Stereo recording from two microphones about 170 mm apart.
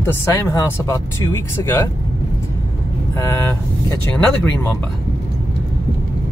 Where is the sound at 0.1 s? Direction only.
15° left (ahead or behind).